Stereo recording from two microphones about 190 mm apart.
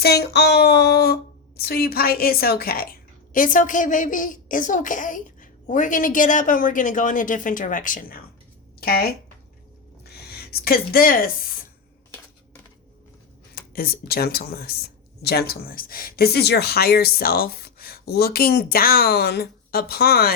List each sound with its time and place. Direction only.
0.0 s speech: 60° left (ahead or behind)
10.5 s speech: 50° left (ahead or behind)
13.6 s speech: 50° left (ahead or behind)